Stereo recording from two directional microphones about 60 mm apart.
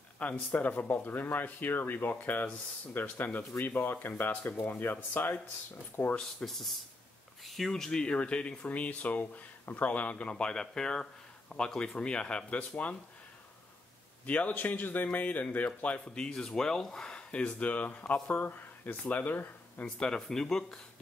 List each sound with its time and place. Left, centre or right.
0.2 s speech: left
6.1 s speech: centre; by 12.9 s left
14.2 s speech: left
20.0 s speech: centre